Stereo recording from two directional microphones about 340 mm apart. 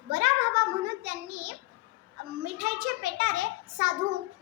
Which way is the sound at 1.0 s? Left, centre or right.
Right.